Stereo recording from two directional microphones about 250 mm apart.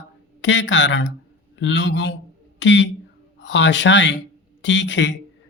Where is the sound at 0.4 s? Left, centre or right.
Left.